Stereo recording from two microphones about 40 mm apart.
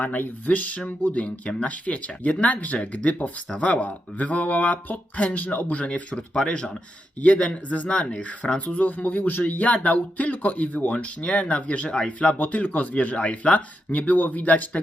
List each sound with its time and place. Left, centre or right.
0.0 s speech: left
5.9 s speech: left
12.4 s speech: left